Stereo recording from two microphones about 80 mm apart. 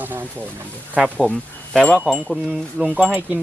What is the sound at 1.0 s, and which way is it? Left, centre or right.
Speech, centre.